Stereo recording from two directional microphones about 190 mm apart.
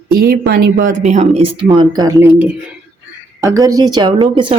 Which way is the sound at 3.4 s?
15° right (ahead or behind).